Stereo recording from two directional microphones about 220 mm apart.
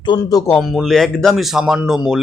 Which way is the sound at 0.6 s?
Centre (ahead or behind).